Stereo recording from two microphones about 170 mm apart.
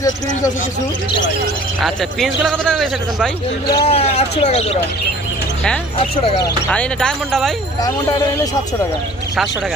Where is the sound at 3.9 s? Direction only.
35° left (ahead or behind).